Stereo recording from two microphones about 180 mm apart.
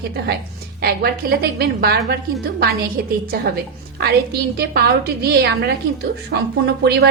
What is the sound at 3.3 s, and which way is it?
A woman's voice, 60° right (ahead or behind).